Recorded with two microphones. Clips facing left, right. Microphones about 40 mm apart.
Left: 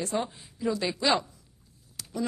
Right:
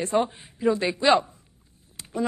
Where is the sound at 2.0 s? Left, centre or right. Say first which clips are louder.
Right 4 dB; right.